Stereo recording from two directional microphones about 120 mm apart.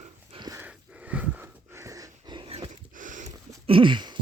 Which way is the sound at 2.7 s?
90° right.